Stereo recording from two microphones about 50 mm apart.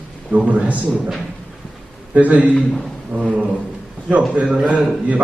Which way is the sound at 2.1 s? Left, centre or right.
Right.